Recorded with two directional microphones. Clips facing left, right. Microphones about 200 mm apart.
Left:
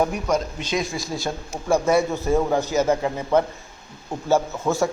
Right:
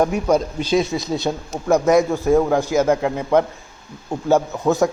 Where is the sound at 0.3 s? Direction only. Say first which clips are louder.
Right 6 dB; 30° right (ahead or behind).